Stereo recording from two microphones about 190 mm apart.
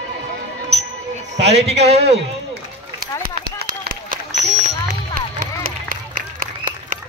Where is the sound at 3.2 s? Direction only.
50° right (ahead or behind).